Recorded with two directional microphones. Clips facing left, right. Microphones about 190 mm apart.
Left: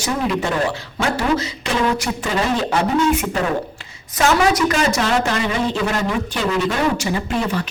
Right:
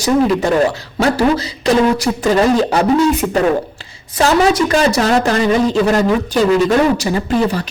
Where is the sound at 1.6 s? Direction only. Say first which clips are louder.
Right 11 dB; 40° right (ahead or behind).